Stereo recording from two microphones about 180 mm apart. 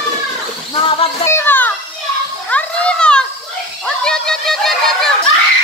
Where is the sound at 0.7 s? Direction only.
30° left (ahead or behind).